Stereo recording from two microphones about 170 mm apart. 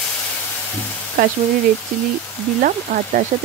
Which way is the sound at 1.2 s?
55° right (ahead or behind).